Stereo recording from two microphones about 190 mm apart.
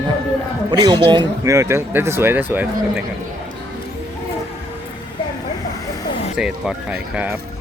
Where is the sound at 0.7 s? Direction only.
25° right (ahead or behind).